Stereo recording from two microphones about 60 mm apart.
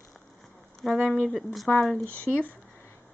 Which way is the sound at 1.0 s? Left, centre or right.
Centre.